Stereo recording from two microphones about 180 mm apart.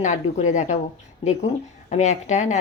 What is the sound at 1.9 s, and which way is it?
Speech, 40° left (ahead or behind).